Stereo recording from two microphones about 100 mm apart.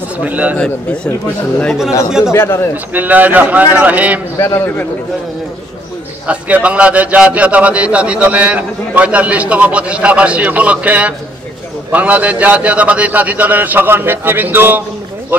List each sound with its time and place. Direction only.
0.2 s a man's voice: 15° right (ahead or behind)
2.3 s a man's voice: 25° left (ahead or behind)
2.9 s a man's voice: 15° right (ahead or behind)
4.4 s a man's voice: 25° left (ahead or behind)
6.2 s a man's voice: 15° right (ahead or behind)